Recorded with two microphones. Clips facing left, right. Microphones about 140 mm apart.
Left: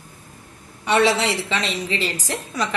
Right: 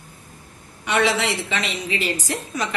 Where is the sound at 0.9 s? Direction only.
35° left (ahead or behind).